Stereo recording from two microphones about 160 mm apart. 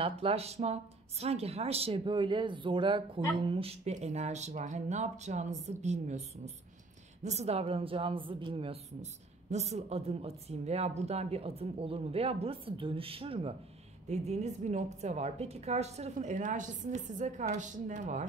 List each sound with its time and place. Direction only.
0.0 s a woman's voice: 35° right (ahead or behind)